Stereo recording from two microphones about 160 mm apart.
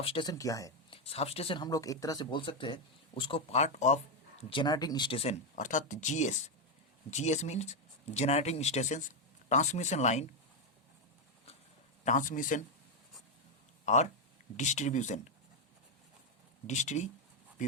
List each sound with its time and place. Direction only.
0.0 s speech: 35° left (ahead or behind)
0.9 s speech: 35° left (ahead or behind)
12.0 s a man's voice: 55° left (ahead or behind)
13.8 s speech: 45° left (ahead or behind)
16.6 s speech: 45° left (ahead or behind)